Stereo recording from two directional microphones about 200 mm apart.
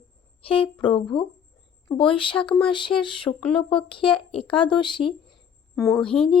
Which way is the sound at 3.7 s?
25° left (ahead or behind).